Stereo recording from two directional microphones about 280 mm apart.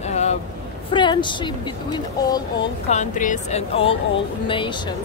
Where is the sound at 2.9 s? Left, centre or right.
Left.